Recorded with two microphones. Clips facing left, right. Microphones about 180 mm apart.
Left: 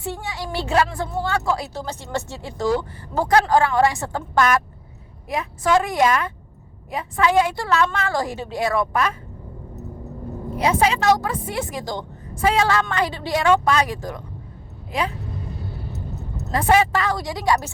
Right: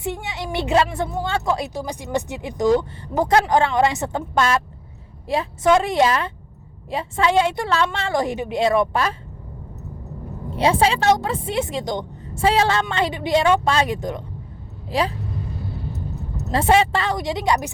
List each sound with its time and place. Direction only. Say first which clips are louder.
0.0 s a woman's voice: right 2 dB; 20° right (ahead or behind)
10.5 s a woman's voice: right 1 dB; 30° right (ahead or behind)
14.8 s speech: right 3 dB; 30° right (ahead or behind)
16.5 s a woman's voice: right 1 dB; 25° right (ahead or behind)